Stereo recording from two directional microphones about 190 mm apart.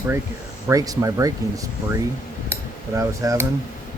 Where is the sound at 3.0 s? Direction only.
15° right (ahead or behind).